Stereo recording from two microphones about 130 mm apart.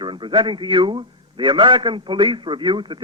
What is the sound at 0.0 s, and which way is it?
A man's voice, 40° right (ahead or behind).